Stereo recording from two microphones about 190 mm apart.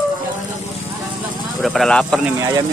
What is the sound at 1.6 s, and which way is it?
Speech, centre (ahead or behind).